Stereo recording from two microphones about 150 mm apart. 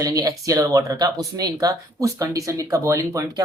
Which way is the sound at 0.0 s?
25° right (ahead or behind).